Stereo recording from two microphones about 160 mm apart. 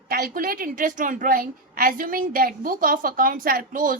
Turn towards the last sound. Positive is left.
turn(degrees=-60)  # may be behind; listen again after turning